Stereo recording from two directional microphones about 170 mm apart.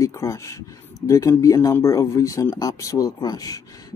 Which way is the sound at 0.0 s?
15° left (ahead or behind).